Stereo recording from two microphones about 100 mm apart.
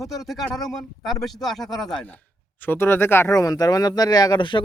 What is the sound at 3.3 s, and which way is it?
Speech, 35° left (ahead or behind).